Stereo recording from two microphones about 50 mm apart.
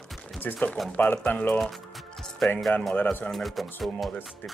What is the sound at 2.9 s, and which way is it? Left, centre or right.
Speech, left.